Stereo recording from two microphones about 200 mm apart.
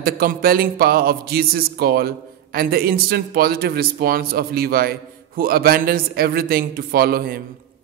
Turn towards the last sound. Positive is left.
turn(degrees=-50)  # may be behind; listen again after turning